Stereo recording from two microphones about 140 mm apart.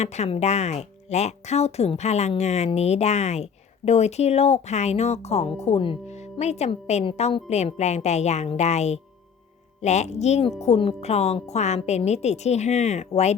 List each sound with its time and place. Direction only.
0.0 s speech: 50° left (ahead or behind)
6.3 s speech: 50° left (ahead or behind)